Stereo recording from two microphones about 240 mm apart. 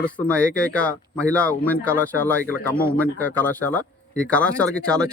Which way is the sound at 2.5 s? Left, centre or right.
Left.